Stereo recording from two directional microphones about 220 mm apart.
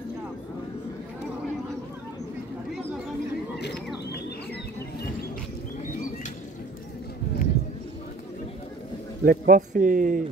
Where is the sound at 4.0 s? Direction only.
45° left (ahead or behind).